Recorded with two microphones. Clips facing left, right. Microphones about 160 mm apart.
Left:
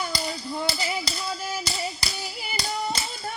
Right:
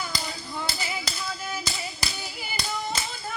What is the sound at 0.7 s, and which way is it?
Tap, 35° left (ahead or behind).